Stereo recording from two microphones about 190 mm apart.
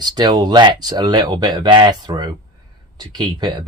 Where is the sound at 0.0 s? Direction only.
20° right (ahead or behind).